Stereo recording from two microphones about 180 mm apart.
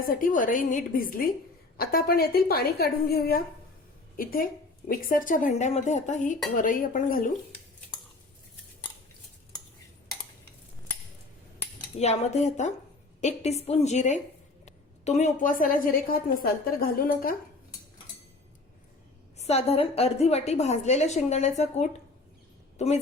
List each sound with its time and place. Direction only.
0.0 s a woman's voice: 50° left (ahead or behind)
11.9 s a woman's voice: 35° left (ahead or behind)
19.4 s a woman's voice: 35° left (ahead or behind)